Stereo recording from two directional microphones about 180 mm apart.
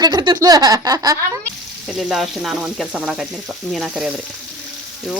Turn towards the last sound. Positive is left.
turn(degrees=0)  # may be behind; listen again after turning